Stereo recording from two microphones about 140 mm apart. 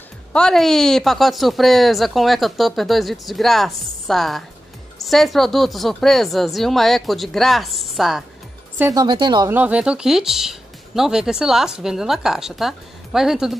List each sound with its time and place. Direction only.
0.3 s speech: 5° left (ahead or behind)
8.9 s speech: 30° right (ahead or behind)
9.5 s speech: 10° right (ahead or behind)